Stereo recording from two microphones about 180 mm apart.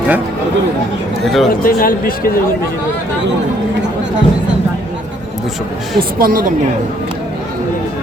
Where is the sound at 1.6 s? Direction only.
55° left (ahead or behind).